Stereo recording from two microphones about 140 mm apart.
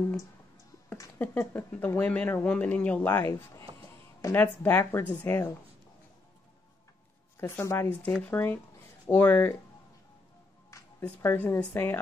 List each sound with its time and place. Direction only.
0.8 s a sound: 20° left (ahead or behind)
1.2 s speech: 15° left (ahead or behind)
7.3 s speech: 15° left (ahead or behind)
10.7 s speech: 15° left (ahead or behind)